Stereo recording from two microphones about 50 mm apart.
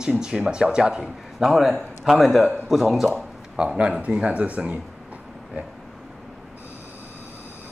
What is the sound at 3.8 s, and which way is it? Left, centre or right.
Speech, right.